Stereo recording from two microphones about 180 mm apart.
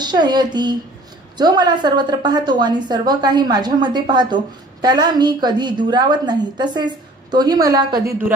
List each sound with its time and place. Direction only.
0.0 s a woman's voice: 25° right (ahead or behind)